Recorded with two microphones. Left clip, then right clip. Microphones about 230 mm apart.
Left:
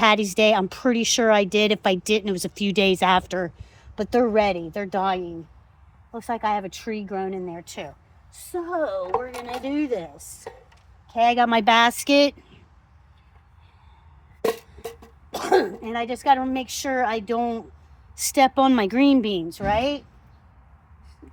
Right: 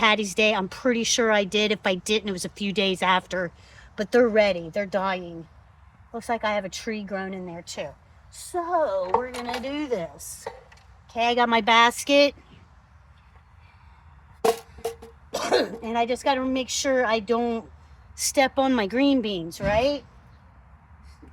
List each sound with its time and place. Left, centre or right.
0.0 s a woman's voice: left
8.6 s a woman's voice: left
11.1 s a woman's voice: left
15.3 s a woman's voice: left